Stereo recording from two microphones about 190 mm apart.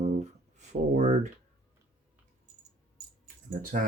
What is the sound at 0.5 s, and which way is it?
Speech, 35° right (ahead or behind).